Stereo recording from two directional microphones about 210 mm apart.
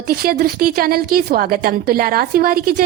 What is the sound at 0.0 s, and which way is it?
A woman's voice, 45° right (ahead or behind).